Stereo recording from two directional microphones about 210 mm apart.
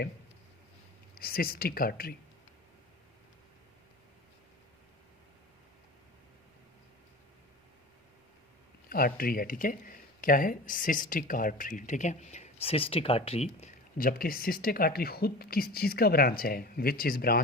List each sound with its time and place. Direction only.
1.1 s speech: 45° left (ahead or behind)
8.9 s speech: 45° left (ahead or behind)